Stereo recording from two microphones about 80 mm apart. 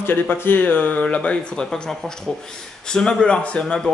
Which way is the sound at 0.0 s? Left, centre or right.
Left.